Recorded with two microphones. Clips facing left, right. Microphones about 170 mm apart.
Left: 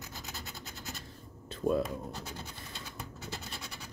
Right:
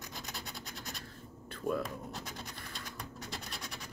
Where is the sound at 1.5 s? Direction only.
25° left (ahead or behind).